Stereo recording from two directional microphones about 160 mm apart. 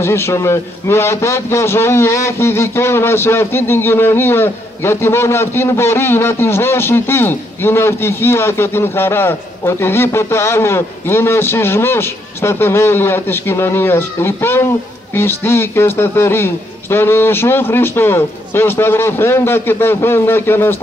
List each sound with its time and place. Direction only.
0.0 s a man's voice: 15° left (ahead or behind)